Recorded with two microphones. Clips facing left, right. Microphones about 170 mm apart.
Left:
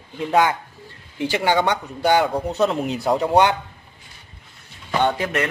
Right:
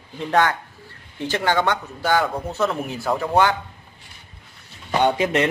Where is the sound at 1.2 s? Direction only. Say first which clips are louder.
Left 2 dB; 15° left (ahead or behind).